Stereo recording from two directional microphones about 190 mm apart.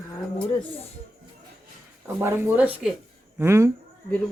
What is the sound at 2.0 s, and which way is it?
Speech, 10° right (ahead or behind).